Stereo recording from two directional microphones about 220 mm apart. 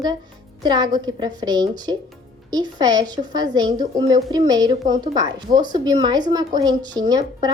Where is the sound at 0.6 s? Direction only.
20° right (ahead or behind).